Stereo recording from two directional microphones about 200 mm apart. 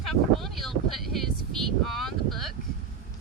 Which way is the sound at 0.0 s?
Centre (ahead or behind).